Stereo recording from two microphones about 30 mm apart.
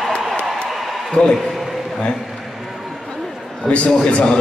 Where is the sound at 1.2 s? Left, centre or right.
Left.